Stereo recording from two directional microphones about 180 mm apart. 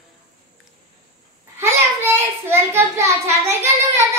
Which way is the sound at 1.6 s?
15° right (ahead or behind).